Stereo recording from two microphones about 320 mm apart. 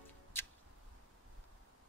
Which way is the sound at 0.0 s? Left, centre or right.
Centre.